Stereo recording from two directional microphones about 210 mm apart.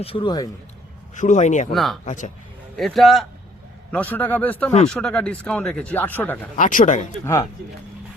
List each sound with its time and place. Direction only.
0.0 s speech: 25° left (ahead or behind)
1.1 s a man's voice: 35° left (ahead or behind)
1.7 s a man's voice: centre (ahead or behind)
2.0 s a man's voice: 35° left (ahead or behind)
2.7 s a man's voice: centre (ahead or behind)
6.6 s a man's voice: 40° left (ahead or behind)